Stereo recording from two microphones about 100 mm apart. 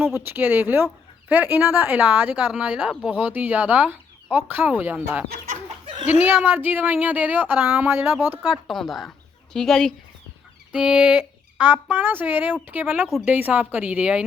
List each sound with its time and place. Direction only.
0.0 s speech: 20° right (ahead or behind)
5.8 s a sound: 60° right (ahead or behind)
6.1 s speech: 15° right (ahead or behind)
8.4 s a woman's voice: 5° left (ahead or behind)
10.7 s speech: 10° right (ahead or behind)